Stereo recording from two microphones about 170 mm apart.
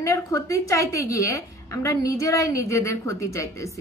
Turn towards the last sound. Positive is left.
turn(degrees=20)  # may be behind; listen again after turning